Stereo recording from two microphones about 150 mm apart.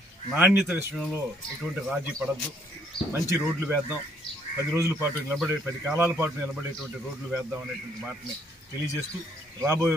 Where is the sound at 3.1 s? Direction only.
15° right (ahead or behind).